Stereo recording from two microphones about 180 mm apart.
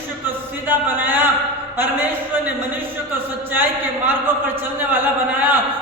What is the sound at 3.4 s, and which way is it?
Speech, 10° right (ahead or behind).